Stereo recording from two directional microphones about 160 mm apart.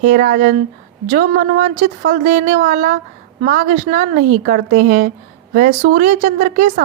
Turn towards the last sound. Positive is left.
turn(degrees=-55)  # may be behind; listen again after turning